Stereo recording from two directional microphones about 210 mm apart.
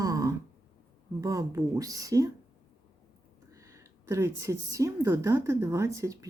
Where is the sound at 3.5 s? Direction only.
15° right (ahead or behind).